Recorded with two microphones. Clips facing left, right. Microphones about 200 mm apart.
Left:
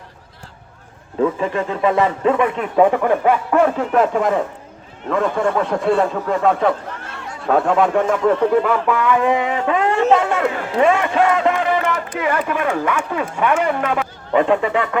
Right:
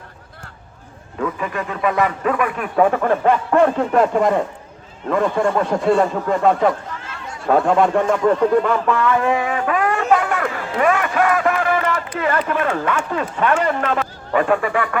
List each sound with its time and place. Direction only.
1.2 s a man's voice: 25° left (ahead or behind)